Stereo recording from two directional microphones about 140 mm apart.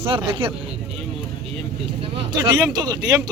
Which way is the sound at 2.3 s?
30° right (ahead or behind).